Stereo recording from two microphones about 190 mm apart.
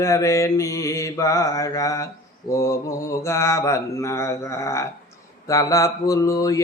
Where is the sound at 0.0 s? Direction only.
15° left (ahead or behind).